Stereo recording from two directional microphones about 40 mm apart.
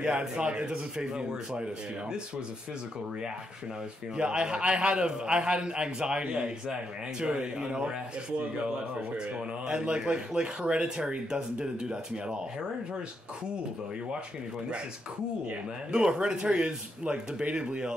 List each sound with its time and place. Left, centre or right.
0.0 s a man's voice: right
4.2 s a man's voice: right
9.7 s a man's voice: right
15.9 s a man's voice: right